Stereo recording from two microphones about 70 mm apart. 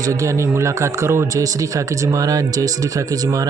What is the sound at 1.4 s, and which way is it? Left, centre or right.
Speech, right.